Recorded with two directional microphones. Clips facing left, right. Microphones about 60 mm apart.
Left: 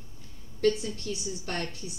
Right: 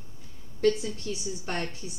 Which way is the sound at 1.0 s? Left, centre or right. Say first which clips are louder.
Right 1 dB; right.